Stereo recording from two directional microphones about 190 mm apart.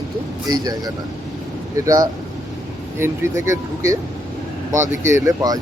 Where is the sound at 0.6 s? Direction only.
20° right (ahead or behind).